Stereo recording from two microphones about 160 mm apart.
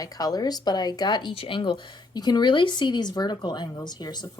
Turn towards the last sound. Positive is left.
turn(degrees=25)  # may be behind; listen again after turning